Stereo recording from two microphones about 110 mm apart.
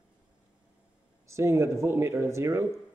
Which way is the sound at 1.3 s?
25° right (ahead or behind).